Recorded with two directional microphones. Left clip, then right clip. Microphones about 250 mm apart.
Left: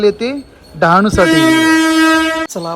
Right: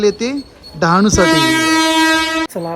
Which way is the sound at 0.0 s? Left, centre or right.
Centre.